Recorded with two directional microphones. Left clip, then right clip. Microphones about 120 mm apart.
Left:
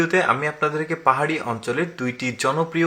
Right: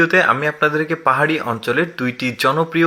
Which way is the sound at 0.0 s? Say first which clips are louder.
Right 5 dB; 20° right (ahead or behind).